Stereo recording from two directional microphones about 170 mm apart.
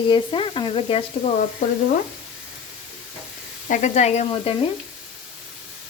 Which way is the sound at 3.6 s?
45° left (ahead or behind).